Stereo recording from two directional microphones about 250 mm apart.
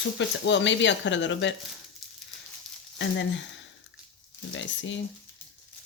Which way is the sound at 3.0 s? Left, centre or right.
Left.